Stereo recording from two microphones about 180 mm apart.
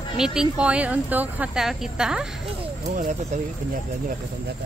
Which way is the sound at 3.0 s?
40° right (ahead or behind).